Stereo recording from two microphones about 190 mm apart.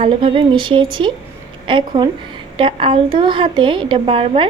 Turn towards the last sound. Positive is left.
turn(degrees=-25)  # may be behind; listen again after turning